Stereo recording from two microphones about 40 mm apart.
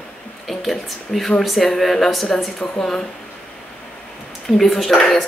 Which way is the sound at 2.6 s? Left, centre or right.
Centre.